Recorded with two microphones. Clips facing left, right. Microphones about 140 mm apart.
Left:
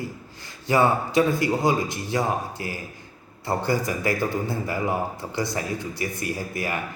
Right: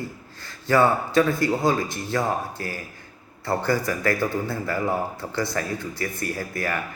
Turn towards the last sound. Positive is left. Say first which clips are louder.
# right 1 dB
turn(degrees=15)  # may be behind; listen again after turning